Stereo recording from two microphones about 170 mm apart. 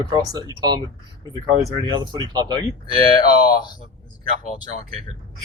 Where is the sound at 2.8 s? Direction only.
25° left (ahead or behind).